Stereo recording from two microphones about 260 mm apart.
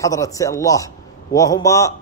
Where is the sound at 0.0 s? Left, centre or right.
Centre.